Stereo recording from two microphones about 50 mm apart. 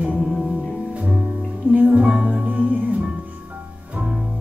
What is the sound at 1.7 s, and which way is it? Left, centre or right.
Music, right.